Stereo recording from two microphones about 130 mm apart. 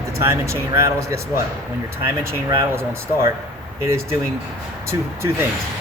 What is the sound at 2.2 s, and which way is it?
Speech, 20° right (ahead or behind).